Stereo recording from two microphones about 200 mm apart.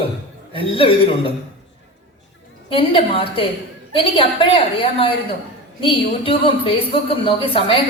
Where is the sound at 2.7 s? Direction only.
25° left (ahead or behind).